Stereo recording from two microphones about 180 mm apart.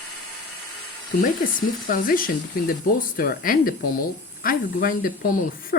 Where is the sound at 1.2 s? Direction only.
50° left (ahead or behind).